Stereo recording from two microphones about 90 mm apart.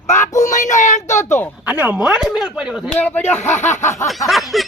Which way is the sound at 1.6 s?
15° right (ahead or behind).